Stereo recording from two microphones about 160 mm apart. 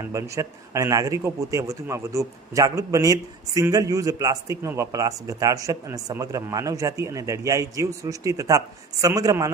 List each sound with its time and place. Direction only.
0.0 s a man's voice: 20° right (ahead or behind)